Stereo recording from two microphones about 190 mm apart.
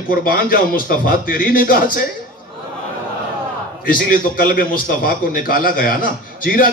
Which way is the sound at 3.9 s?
50° left (ahead or behind).